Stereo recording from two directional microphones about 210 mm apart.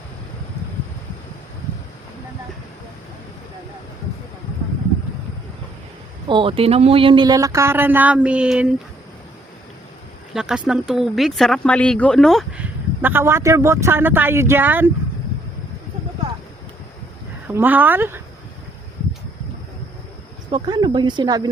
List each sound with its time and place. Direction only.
6.2 s speech: 25° right (ahead or behind); by 8.7 s 5° right (ahead or behind)
10.3 s speech: 5° right (ahead or behind)
17.5 s speech: 10° right (ahead or behind)
20.5 s speech: 20° right (ahead or behind)